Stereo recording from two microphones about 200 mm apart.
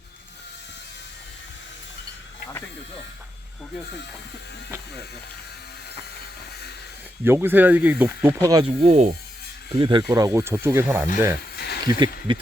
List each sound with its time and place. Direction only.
7.3 s speech: 10° right (ahead or behind)
8.8 s speech: 35° right (ahead or behind)
9.7 s speech: 25° right (ahead or behind)
11.5 s a sound: 55° left (ahead or behind)
11.9 s speech: 20° right (ahead or behind)